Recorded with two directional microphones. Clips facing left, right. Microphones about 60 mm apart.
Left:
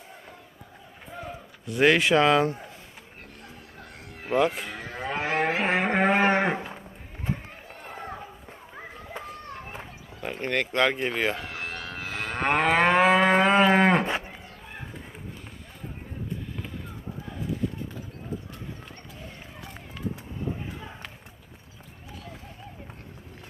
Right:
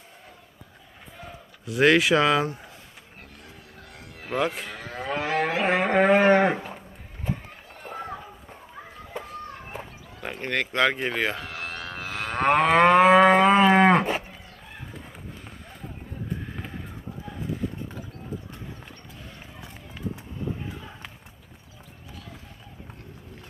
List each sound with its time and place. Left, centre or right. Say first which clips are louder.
1.6 s speech: right 1 dB; centre
4.5 s moo: even; centre
5.2 s moo: even; left
5.6 s a sound: right 5 dB; centre
6.2 s livestock: right 4 dB; centre
10.2 s speech: left 1 dB; centre